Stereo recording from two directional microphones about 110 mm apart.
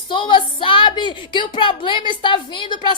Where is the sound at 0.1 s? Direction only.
50° left (ahead or behind).